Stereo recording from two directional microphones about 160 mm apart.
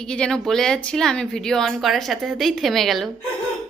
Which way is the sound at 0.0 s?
5° left (ahead or behind).